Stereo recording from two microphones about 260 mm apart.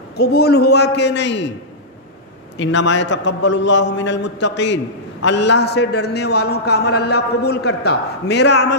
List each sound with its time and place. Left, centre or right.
0.2 s a man's voice: left
2.5 s a man's voice: left